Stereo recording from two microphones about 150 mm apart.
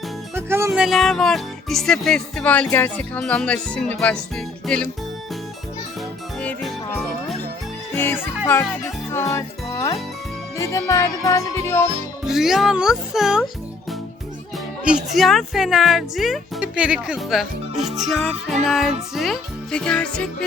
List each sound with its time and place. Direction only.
0.3 s music: 15° right (ahead or behind)
0.7 s speech: centre (ahead or behind)
6.4 s music: 5° left (ahead or behind)
7.9 s speech: 15° left (ahead or behind)
9.1 s music: 20° left (ahead or behind)
12.3 s speech: 5° right (ahead or behind)
14.8 s speech: 5° right (ahead or behind)